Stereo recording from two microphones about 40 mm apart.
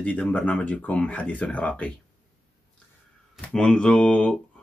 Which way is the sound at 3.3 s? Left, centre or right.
Left.